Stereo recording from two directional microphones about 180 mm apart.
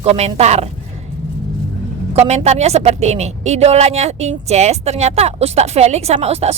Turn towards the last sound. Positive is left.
turn(degrees=-35)  # may be behind; listen again after turning